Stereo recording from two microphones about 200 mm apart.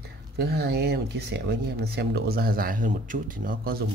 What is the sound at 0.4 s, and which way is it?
Speech, 55° right (ahead or behind).